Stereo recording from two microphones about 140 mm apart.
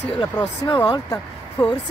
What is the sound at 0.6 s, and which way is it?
Speech, 30° left (ahead or behind).